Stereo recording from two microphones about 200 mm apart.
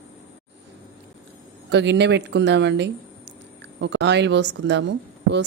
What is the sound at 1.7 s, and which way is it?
Speech, 60° right (ahead or behind).